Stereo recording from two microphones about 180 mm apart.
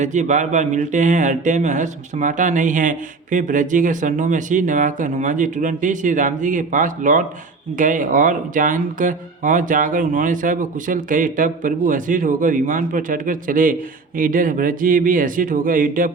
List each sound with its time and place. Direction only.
0.0 s speech: 40° right (ahead or behind)